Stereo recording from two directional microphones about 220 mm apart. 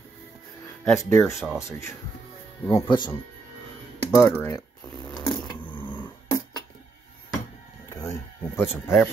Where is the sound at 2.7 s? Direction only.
20° left (ahead or behind).